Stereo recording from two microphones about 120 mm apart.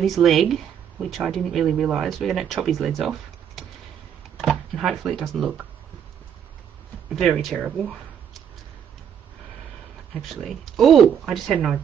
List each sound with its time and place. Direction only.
0.0 s speech: centre (ahead or behind)
7.1 s speech: centre (ahead or behind)
10.2 s speech: centre (ahead or behind)